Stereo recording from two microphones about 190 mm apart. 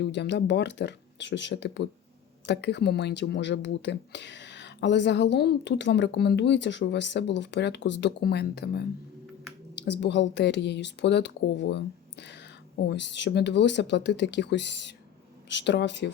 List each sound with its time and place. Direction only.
0.0 s speech: 65° left (ahead or behind)